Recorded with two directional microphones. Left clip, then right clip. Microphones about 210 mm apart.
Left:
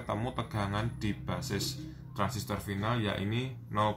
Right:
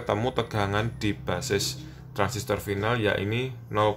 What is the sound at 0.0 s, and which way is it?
Speech, 40° right (ahead or behind).